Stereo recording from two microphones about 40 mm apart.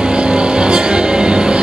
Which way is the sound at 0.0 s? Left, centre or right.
Right.